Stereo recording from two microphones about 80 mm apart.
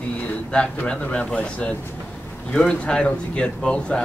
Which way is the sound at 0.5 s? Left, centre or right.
Centre.